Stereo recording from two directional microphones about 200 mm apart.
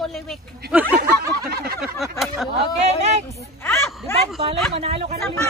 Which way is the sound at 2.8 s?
35° right (ahead or behind).